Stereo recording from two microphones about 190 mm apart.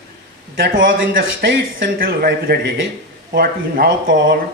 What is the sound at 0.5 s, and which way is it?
Speech, 50° right (ahead or behind).